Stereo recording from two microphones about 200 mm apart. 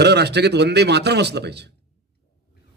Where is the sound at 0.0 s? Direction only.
55° right (ahead or behind).